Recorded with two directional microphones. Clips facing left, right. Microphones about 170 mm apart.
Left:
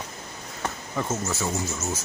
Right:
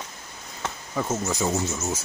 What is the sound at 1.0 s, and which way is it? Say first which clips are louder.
Speech: right 2 dB; 10° right (ahead or behind).